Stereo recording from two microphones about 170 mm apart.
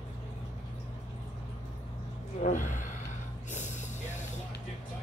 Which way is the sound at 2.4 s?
45° left (ahead or behind).